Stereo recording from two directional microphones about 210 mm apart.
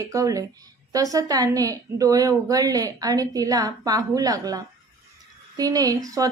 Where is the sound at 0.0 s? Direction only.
15° right (ahead or behind).